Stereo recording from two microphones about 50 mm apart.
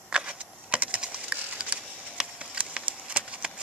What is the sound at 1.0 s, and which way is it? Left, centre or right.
Wood, right.